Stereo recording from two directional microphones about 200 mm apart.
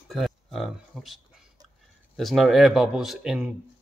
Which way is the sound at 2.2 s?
Centre (ahead or behind).